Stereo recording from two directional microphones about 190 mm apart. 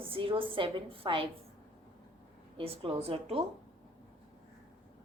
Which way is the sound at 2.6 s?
30° right (ahead or behind).